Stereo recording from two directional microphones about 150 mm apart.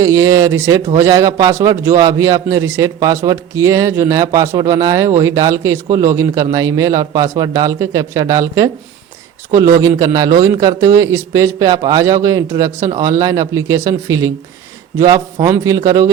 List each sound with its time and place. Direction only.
0.0 s a man's voice: 20° right (ahead or behind)